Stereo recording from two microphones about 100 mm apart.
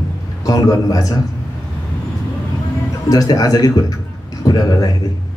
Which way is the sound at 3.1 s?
40° left (ahead or behind).